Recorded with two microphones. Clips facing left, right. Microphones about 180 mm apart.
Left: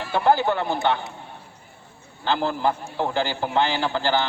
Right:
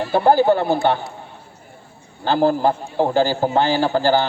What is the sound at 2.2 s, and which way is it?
A man's voice, 45° right (ahead or behind).